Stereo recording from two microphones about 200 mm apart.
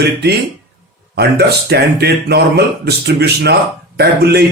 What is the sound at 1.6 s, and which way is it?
A man's voice, 55° right (ahead or behind).